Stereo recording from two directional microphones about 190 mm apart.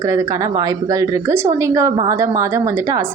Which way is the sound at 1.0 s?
15° right (ahead or behind).